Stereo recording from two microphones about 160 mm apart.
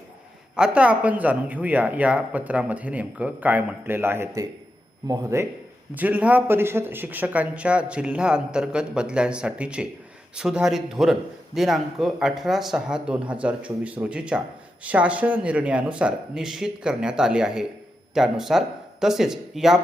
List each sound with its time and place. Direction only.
0.5 s a man's voice: 5° right (ahead or behind)